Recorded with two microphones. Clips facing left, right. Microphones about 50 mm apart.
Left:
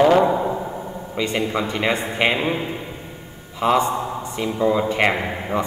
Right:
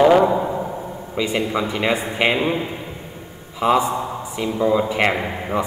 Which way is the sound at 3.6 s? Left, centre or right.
Centre.